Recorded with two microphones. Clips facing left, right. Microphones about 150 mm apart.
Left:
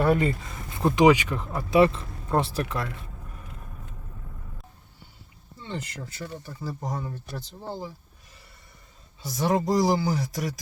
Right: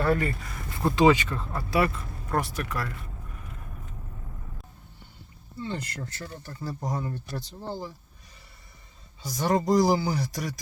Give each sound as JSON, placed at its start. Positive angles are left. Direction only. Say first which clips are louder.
{"t": 0.0, "sound": "speech", "louder": "left 3 dB", "side_deg": 20}
{"t": 5.5, "sound": "speech", "louder": "right 2 dB", "side_deg": 0}
{"t": 9.2, "sound": "speech", "louder": "even", "side_deg": 0}